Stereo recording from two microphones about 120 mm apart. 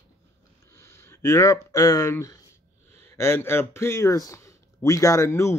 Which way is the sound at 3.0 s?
20° left (ahead or behind).